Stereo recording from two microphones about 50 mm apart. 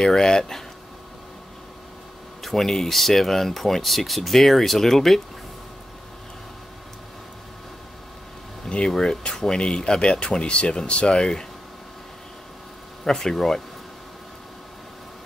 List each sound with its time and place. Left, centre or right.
0.0 s speech: centre
2.4 s speech: centre
8.6 s a sound: centre
8.9 s speech: centre
13.0 s speech: centre